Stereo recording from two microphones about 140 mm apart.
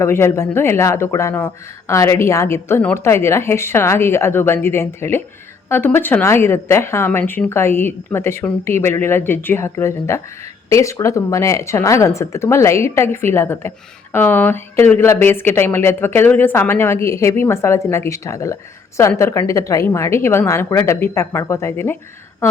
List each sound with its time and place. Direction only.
0.0 s a woman's voice: 20° left (ahead or behind)